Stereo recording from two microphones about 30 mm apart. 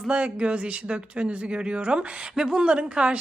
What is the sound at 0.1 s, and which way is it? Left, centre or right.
Speech, right.